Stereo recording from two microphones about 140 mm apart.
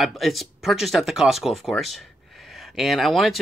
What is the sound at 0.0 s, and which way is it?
Speech, centre (ahead or behind).